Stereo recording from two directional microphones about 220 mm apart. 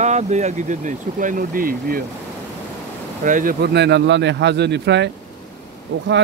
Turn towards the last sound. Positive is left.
turn(degrees=-50)  # may be behind; listen again after turning